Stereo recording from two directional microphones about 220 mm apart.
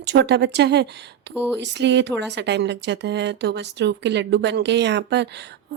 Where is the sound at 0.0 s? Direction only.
50° right (ahead or behind).